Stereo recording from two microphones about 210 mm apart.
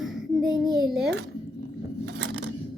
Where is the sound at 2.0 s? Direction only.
55° right (ahead or behind).